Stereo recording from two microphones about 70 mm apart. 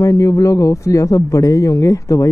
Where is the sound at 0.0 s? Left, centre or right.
Left.